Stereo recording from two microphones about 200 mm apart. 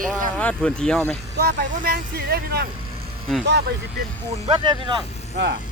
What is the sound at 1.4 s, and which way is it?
Speech, 50° right (ahead or behind).